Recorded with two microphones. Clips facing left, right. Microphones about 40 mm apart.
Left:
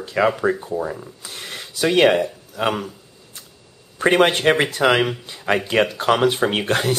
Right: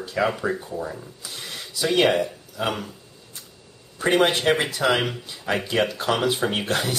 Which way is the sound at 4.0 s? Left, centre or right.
Left.